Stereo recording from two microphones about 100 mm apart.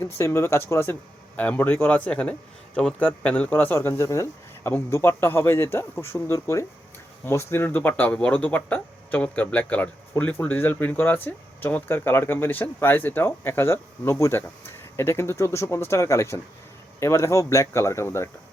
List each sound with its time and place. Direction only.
0.0 s speech: 25° left (ahead or behind)